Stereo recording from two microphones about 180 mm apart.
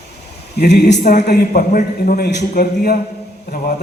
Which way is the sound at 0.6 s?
70° left (ahead or behind).